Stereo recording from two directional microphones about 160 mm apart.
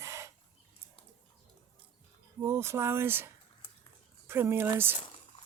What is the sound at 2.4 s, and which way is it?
Speech, 15° right (ahead or behind).